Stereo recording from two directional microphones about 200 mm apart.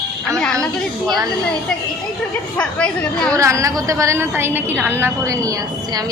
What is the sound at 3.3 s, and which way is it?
A woman's voice, 15° right (ahead or behind).